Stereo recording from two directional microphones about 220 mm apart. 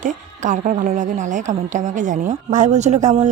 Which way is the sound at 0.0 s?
35° right (ahead or behind).